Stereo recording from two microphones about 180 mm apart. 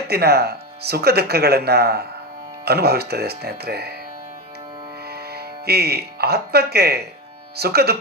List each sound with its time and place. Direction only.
0.1 s speech: 60° right (ahead or behind)
5.0 s speech: 60° right (ahead or behind)